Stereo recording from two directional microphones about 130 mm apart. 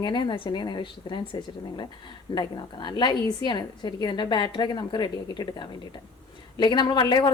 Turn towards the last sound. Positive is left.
turn(degrees=35)  # may be behind; listen again after turning